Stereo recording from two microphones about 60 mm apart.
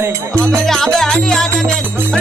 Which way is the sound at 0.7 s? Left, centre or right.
Centre.